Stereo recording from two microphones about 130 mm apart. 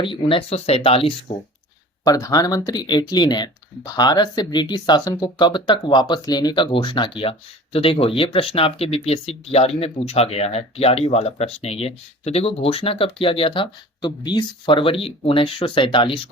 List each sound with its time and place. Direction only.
0.0 s speech: 40° left (ahead or behind)
2.0 s speech: 25° left (ahead or behind)